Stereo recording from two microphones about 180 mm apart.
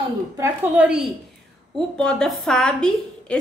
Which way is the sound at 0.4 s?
5° right (ahead or behind).